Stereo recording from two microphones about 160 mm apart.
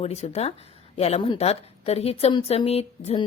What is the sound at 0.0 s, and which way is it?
A woman's voice, 40° left (ahead or behind).